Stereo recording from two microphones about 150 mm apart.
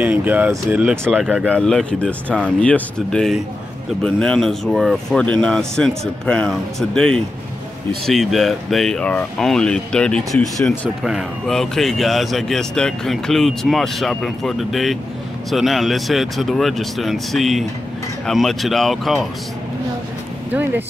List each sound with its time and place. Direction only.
0.0 s speech: 10° right (ahead or behind)